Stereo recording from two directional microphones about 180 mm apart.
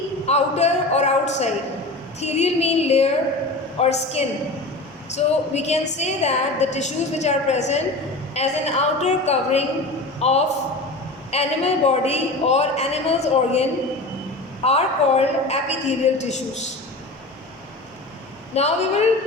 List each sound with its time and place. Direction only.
0.3 s a sound: 35° left (ahead or behind)
2.2 s a woman's voice: 35° left (ahead or behind)
18.5 s a woman's voice: 35° left (ahead or behind)